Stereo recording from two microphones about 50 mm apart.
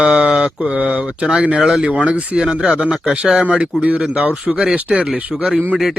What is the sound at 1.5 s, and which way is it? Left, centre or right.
Speech, centre.